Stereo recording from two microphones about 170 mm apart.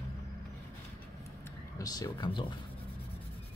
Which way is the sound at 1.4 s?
20° left (ahead or behind).